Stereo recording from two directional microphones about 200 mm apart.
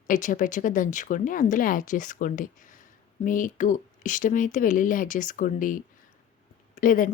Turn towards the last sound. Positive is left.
turn(degrees=40)  # may be behind; listen again after turning